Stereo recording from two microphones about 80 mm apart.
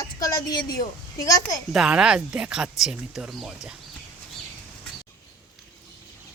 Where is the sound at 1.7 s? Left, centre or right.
Centre.